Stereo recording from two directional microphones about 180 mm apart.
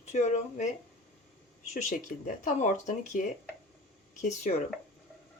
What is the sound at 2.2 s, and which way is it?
Speech, 45° left (ahead or behind).